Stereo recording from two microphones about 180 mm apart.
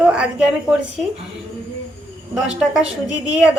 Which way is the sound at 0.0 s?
5° right (ahead or behind).